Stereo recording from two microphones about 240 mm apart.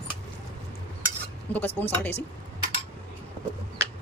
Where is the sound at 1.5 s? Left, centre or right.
Centre.